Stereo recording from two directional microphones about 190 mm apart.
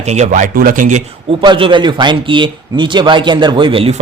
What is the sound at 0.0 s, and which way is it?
Speech, 35° right (ahead or behind).